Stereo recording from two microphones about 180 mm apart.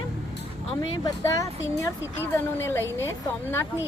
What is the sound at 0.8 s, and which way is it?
Speech, 20° left (ahead or behind).